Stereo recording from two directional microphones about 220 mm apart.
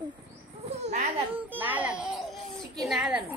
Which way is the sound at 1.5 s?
5° right (ahead or behind).